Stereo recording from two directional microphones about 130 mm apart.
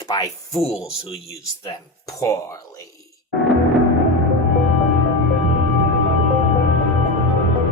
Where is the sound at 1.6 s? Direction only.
25° left (ahead or behind).